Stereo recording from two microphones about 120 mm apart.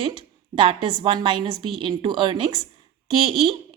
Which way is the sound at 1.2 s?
40° right (ahead or behind).